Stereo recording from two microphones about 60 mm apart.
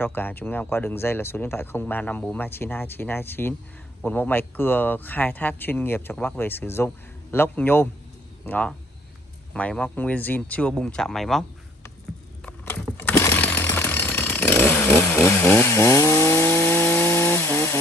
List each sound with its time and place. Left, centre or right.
0.0 s speech: left
9.5 s speech: centre
9.9 s speech: left
10.7 s speech: centre
13.1 s chainsaw: left
13.4 s chainsaw: left